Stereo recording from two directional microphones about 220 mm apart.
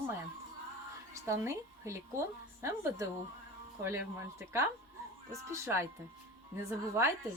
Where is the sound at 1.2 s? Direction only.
10° right (ahead or behind).